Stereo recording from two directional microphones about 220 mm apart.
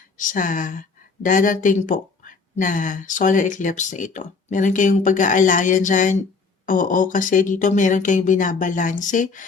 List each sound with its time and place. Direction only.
0.2 s speech: 35° left (ahead or behind)